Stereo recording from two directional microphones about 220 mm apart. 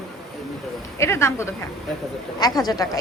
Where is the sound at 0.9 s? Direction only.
10° left (ahead or behind).